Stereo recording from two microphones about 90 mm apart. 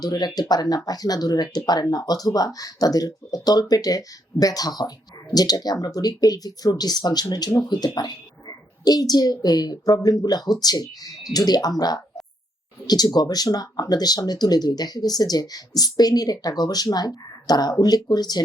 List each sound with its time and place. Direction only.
0.0 s speech: 50° left (ahead or behind)